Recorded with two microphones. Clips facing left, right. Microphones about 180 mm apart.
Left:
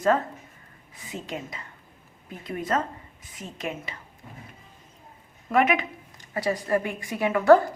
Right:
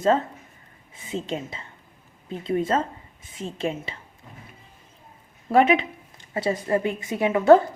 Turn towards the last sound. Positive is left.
turn(degrees=-25)  # may be behind; listen again after turning